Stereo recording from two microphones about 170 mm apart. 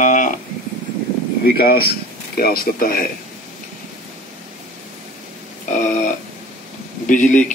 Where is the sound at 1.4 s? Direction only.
65° left (ahead or behind).